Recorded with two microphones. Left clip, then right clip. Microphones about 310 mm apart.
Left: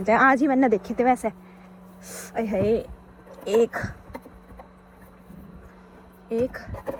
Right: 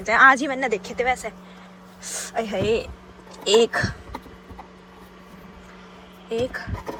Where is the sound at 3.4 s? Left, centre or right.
Centre.